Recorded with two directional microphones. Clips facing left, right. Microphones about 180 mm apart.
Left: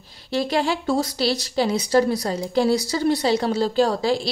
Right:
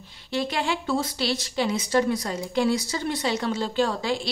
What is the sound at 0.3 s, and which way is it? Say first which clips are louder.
Speech: left 4 dB; 35° left (ahead or behind).